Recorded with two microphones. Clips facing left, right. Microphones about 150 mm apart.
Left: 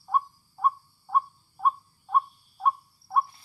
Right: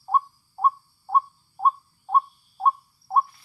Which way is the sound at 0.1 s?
40° right (ahead or behind).